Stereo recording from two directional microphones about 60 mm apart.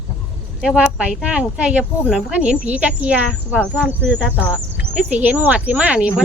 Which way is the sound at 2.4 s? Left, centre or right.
Centre.